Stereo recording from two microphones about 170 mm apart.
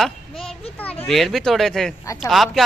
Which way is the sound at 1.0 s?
Centre (ahead or behind).